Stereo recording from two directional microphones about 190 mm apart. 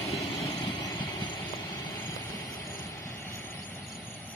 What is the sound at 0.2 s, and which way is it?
Vehicle, 30° left (ahead or behind).